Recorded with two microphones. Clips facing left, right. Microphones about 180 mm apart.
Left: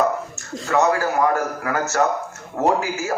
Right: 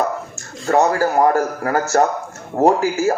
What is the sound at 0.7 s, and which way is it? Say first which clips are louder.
Speech: right 3 dB; 35° right (ahead or behind).